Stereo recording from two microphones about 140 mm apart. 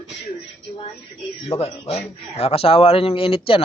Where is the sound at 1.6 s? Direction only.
45° left (ahead or behind).